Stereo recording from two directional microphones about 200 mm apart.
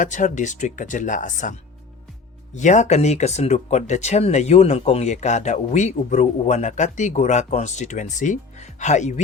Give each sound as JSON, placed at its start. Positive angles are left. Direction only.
{"t": 0.0, "sound": "speech", "side_deg": 40}
{"t": 2.6, "sound": "speech", "side_deg": 35}